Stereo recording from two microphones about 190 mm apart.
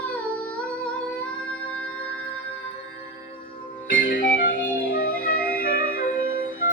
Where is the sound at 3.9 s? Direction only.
50° left (ahead or behind).